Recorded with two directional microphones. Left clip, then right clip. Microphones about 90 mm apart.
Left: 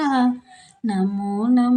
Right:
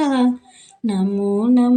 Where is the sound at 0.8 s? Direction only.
25° right (ahead or behind).